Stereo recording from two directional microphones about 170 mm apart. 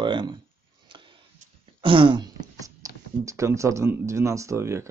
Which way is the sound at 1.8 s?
30° right (ahead or behind).